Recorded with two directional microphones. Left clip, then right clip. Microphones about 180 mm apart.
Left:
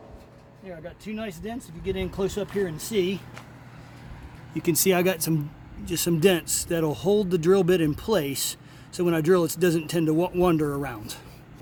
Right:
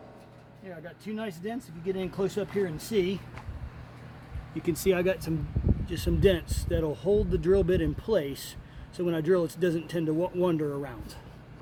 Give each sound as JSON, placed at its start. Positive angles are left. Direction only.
{"t": 0.7, "sound": "speech", "side_deg": 5}
{"t": 2.0, "sound": "speech", "side_deg": 15}
{"t": 4.5, "sound": "speech", "side_deg": 65}